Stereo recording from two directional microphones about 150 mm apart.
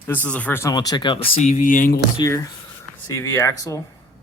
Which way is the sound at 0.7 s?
25° left (ahead or behind).